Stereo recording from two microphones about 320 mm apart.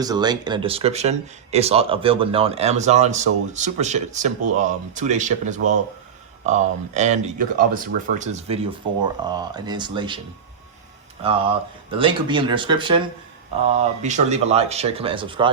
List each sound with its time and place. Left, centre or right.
0.0 s speech: centre
11.2 s speech: centre